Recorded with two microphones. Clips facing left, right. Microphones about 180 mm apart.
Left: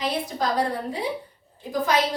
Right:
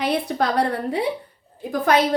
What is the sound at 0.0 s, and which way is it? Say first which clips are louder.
A woman's voice: right 4 dB; 65° right (ahead or behind).